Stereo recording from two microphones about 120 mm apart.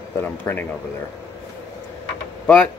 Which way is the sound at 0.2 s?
15° left (ahead or behind).